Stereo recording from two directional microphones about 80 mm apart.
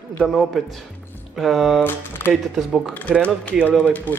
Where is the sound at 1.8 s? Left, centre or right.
Left.